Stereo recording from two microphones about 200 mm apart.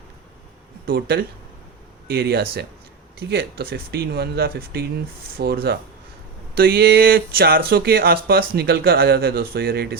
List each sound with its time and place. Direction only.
0.9 s speech: 50° right (ahead or behind)